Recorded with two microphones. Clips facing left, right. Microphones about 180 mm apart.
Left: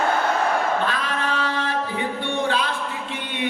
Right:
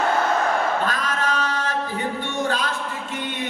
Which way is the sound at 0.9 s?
40° right (ahead or behind).